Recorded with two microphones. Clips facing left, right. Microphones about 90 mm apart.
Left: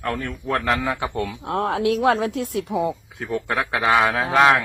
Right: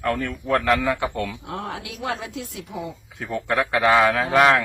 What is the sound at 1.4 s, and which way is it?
Speech, 65° left (ahead or behind).